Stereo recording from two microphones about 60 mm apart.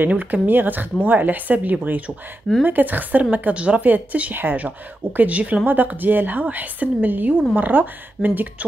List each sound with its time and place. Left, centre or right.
0.0 s a woman's voice: right